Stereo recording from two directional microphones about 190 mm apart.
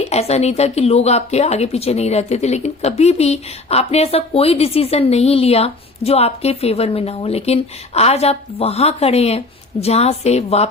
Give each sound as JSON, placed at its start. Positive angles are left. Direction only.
{"t": 0.0, "sound": "speech", "side_deg": 35}